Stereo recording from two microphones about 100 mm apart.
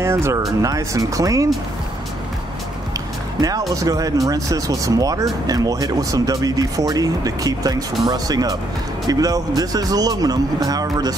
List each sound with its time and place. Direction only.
0.0 s speech: 25° right (ahead or behind)
3.3 s speech: 35° right (ahead or behind)